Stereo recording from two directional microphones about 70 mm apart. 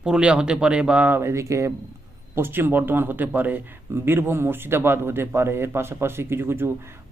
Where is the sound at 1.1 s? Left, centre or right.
Right.